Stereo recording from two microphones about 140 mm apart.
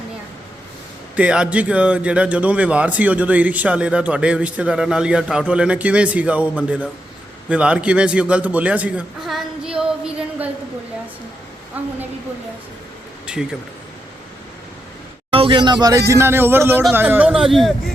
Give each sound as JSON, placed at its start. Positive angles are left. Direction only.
{"t": 1.1, "sound": "a man's voice", "side_deg": -10}
{"t": 13.2, "sound": "speech", "side_deg": -5}
{"t": 15.3, "sound": "a man's voice", "side_deg": -40}